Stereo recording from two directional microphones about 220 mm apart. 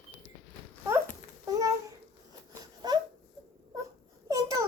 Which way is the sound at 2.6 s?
20° right (ahead or behind).